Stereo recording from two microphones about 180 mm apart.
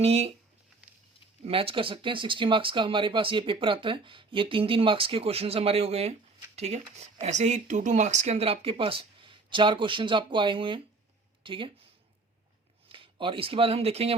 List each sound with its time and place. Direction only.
0.0 s speech: 35° right (ahead or behind)
1.5 s speech: 30° right (ahead or behind)
12.9 s speech: 30° right (ahead or behind)